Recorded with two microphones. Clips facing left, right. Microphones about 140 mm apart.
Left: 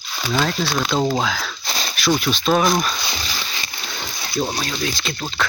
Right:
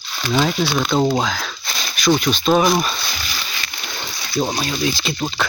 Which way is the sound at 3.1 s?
25° left (ahead or behind).